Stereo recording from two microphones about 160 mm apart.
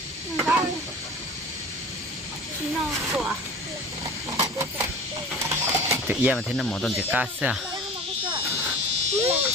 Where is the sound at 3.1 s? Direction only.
5° right (ahead or behind).